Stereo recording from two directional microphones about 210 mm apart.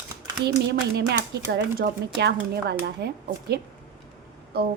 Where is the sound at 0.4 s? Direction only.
50° right (ahead or behind).